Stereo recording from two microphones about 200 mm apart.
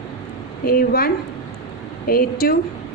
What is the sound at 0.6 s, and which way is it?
Speech, 45° left (ahead or behind).